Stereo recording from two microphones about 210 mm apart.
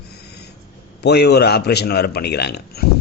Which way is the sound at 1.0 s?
50° left (ahead or behind).